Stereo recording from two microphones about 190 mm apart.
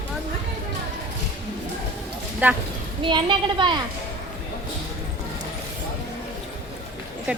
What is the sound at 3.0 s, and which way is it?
Speech, 25° right (ahead or behind).